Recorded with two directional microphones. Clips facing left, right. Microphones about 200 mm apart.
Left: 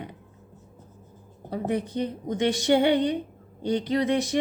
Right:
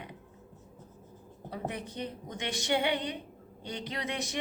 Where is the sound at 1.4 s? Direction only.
35° left (ahead or behind).